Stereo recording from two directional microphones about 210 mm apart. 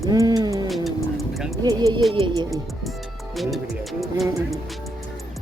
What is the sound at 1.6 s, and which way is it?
Speech, 15° right (ahead or behind).